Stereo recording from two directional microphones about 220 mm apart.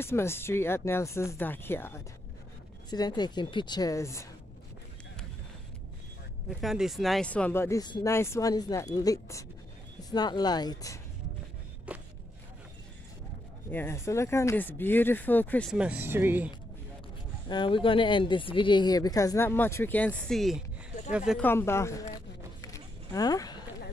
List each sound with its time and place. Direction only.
0.0 s a woman's voice: 10° left (ahead or behind)
6.6 s speech: centre (ahead or behind); by 11.0 s 15° left (ahead or behind)
11.9 s a sound: 5° right (ahead or behind)
13.7 s speech: 10° left (ahead or behind)
15.7 s speech: 5° right (ahead or behind)
17.5 s speech: 20° left (ahead or behind)
22.6 s a sound: 15° left (ahead or behind)